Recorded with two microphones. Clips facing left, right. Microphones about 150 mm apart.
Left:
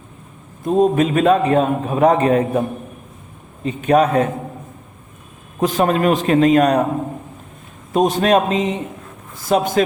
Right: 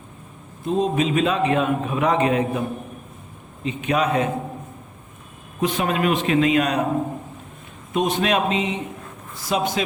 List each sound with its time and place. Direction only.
0.6 s a man's voice: 50° left (ahead or behind)
5.5 s a man's voice: 40° left (ahead or behind)
7.9 s a man's voice: 40° left (ahead or behind)